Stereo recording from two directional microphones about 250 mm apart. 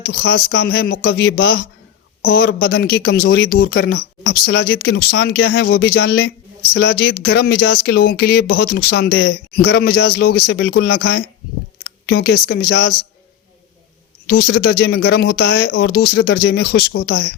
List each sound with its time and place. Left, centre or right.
0.3 s speech: left
14.3 s speech: left